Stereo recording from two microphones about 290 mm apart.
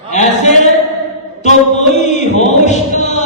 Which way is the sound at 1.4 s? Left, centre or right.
Left.